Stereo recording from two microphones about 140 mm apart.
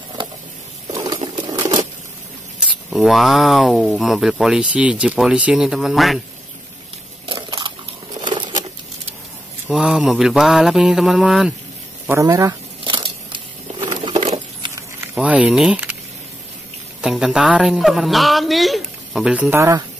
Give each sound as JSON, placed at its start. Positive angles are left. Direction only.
{"t": 0.9, "sound": "a sound", "side_deg": -30}
{"t": 1.3, "sound": "patter", "side_deg": -25}
{"t": 2.9, "sound": "speech", "side_deg": 0}
{"t": 7.3, "sound": "a sound", "side_deg": -30}
{"t": 8.2, "sound": "crumpling", "side_deg": -35}
{"t": 9.7, "sound": "speech", "side_deg": -5}
{"t": 12.1, "sound": "a sound", "side_deg": -25}
{"t": 14.2, "sound": "patter", "side_deg": -45}
{"t": 15.1, "sound": "speech", "side_deg": -10}
{"t": 17.0, "sound": "speech", "side_deg": -5}
{"t": 19.5, "sound": "speech", "side_deg": -20}